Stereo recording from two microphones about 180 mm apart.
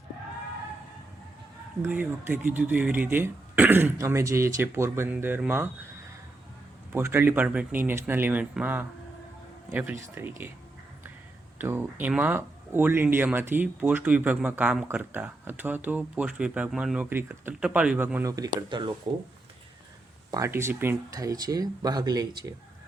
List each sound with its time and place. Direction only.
1.8 s speech: 10° right (ahead or behind)
6.9 s speech: 15° right (ahead or behind)
11.5 s speech: 10° right (ahead or behind)
20.3 s speech: 15° right (ahead or behind)